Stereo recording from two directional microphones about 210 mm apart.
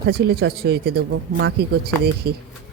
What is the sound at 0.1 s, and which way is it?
Speech, 50° right (ahead or behind).